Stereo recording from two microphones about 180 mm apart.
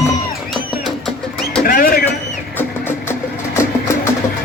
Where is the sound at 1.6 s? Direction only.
55° left (ahead or behind).